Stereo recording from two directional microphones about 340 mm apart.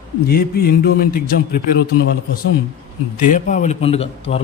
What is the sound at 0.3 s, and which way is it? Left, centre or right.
A man's voice, left.